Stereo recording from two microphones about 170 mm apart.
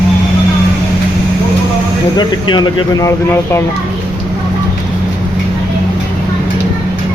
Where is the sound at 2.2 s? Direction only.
25° left (ahead or behind).